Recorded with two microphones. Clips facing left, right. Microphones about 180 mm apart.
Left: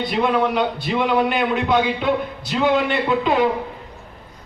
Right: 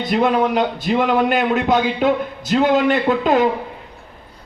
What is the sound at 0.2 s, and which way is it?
A man's voice, 45° right (ahead or behind).